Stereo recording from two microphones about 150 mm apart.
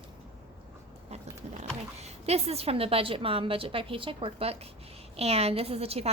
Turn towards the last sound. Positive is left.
turn(degrees=-45)  # may be behind; listen again after turning